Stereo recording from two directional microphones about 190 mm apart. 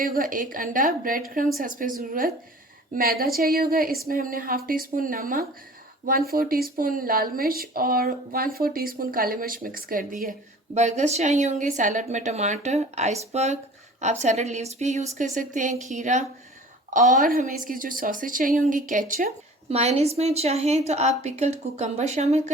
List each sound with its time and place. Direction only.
0.0 s a woman's voice: 50° right (ahead or behind)
19.7 s a woman's voice: 35° right (ahead or behind)